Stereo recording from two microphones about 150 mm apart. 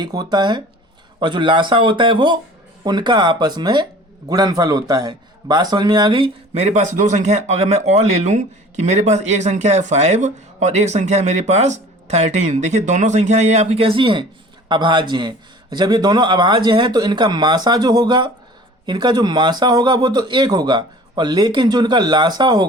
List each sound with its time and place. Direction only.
0.0 s a man's voice: 25° right (ahead or behind)